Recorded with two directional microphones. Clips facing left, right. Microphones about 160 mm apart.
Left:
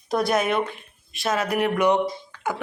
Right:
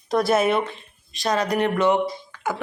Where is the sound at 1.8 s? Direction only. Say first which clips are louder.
Even; 20° left (ahead or behind).